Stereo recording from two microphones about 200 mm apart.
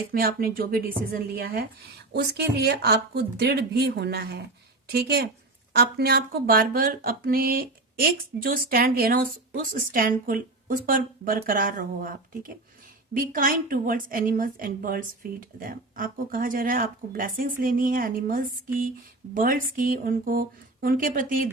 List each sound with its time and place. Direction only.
0.1 s speech: 50° right (ahead or behind)
2.1 s speech: 55° right (ahead or behind)